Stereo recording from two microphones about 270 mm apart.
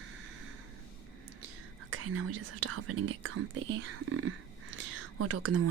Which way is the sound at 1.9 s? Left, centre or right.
Right.